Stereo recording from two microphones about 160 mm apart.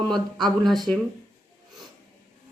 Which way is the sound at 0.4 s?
Centre (ahead or behind).